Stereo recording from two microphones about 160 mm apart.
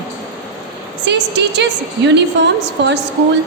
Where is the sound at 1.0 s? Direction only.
90° right.